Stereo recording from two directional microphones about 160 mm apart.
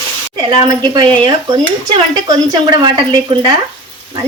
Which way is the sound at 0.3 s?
25° right (ahead or behind).